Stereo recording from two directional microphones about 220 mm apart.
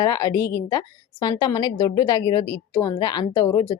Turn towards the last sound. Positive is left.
turn(degrees=15)  # may be behind; listen again after turning